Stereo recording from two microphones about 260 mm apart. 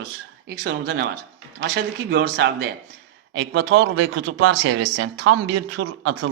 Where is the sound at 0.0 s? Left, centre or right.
Right.